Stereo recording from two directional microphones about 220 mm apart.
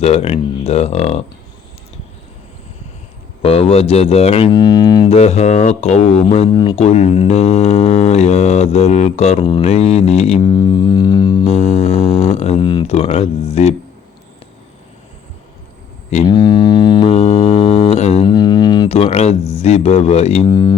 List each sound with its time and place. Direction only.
0.0 s speech: 30° left (ahead or behind)
3.4 s speech: 25° left (ahead or behind)
5.1 s speech: 30° left (ahead or behind)
11.4 s speech: 30° left (ahead or behind)
16.3 s music: 20° left (ahead or behind)